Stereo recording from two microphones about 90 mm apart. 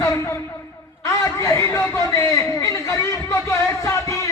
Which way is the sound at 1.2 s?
35° left (ahead or behind).